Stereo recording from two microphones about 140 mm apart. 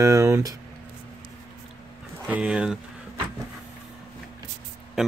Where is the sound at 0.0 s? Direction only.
20° right (ahead or behind).